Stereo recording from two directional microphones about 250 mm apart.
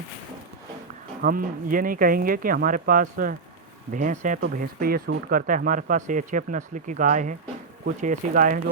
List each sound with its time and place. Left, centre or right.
1.2 s speech: right